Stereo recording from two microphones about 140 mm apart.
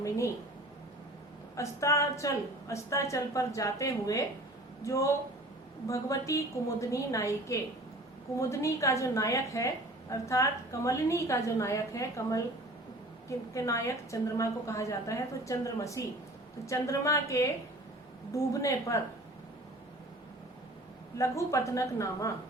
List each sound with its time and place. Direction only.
1.5 s a woman's voice: 20° left (ahead or behind)
13.5 s a woman's voice: 20° left (ahead or behind)
21.2 s a woman's voice: 20° left (ahead or behind)